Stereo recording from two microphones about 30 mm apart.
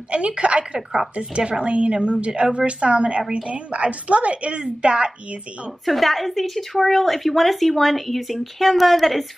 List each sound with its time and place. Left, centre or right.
0.1 s speech: right
3.7 s speech: right
5.9 s speech: centre